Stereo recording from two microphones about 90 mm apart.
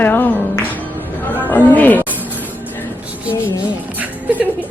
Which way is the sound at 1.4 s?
20° left (ahead or behind).